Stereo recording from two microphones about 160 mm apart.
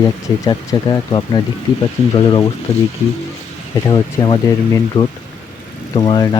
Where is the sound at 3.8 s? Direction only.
25° left (ahead or behind).